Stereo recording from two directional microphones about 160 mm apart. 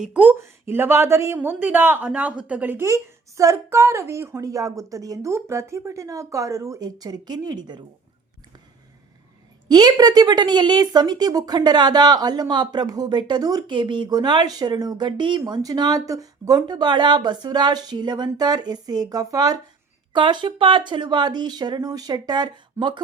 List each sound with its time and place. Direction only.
0.0 s a man's voice: 10° right (ahead or behind); by 7.8 s 25° right (ahead or behind)
9.6 s a woman's voice: 25° right (ahead or behind)